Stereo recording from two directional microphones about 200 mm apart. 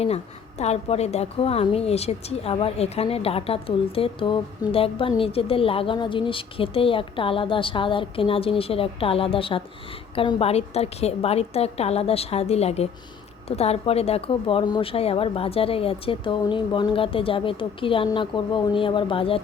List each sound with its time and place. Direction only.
0.6 s a woman's voice: 30° left (ahead or behind)